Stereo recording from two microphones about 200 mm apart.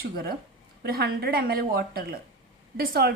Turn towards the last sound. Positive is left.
turn(degrees=-50)  # may be behind; listen again after turning